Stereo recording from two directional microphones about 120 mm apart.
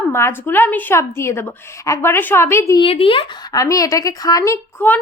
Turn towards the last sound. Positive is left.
turn(degrees=15)  # may be behind; listen again after turning